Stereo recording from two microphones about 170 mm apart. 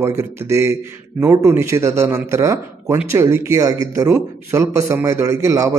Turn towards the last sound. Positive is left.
turn(degrees=-20)  # may be behind; listen again after turning